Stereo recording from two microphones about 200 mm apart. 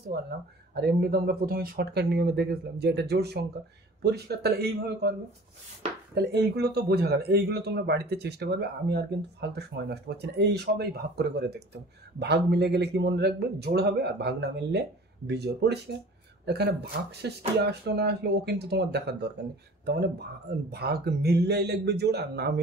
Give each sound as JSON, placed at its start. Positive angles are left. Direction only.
{"t": 0.1, "sound": "speech", "side_deg": -50}
{"t": 6.1, "sound": "speech", "side_deg": -55}